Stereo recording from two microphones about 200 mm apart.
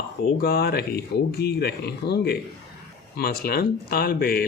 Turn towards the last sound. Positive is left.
turn(degrees=50)  # may be behind; listen again after turning